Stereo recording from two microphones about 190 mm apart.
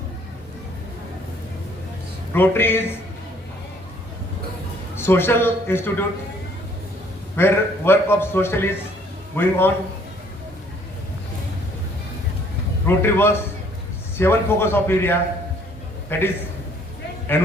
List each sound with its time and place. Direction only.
2.3 s a man's voice: 10° left (ahead or behind)
4.9 s a man's voice: 10° left (ahead or behind)
7.3 s a man's voice: 10° left (ahead or behind)
12.8 s a man's voice: 10° left (ahead or behind)
17.3 s a man's voice: 10° left (ahead or behind)